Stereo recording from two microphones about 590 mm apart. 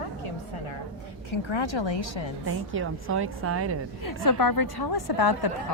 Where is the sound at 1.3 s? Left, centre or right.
Left.